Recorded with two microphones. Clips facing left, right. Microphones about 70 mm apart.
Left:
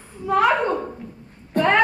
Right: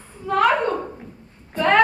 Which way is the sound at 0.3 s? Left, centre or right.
Centre.